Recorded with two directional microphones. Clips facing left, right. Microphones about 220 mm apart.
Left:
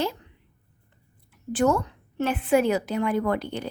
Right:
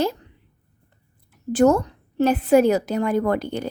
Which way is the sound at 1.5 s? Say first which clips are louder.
Right 6 dB; 40° right (ahead or behind).